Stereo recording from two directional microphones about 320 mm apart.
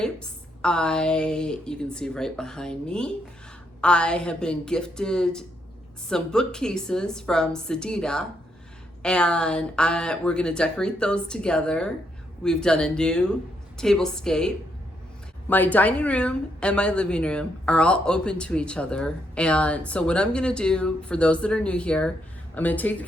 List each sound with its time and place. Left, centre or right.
0.0 s a woman's voice: centre